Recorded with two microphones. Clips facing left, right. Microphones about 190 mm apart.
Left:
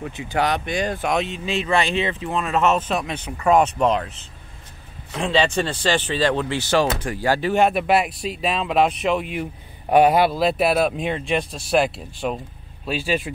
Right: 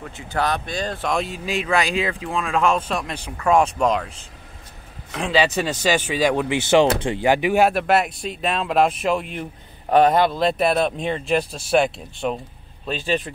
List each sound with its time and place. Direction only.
0.0 s speech: 15° left (ahead or behind)
1.1 s speech: centre (ahead or behind)
5.1 s speech: centre (ahead or behind)
7.6 s speech: centre (ahead or behind)